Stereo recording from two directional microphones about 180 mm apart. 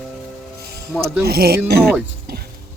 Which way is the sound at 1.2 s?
60° right (ahead or behind).